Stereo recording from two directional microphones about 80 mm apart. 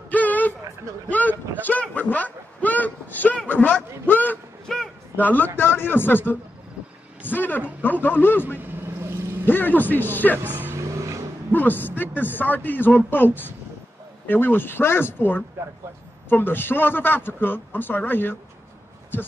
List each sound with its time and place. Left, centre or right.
0.1 s a sound: left
5.2 s a man's voice: left
10.4 s vehicle: right
11.5 s a man's voice: left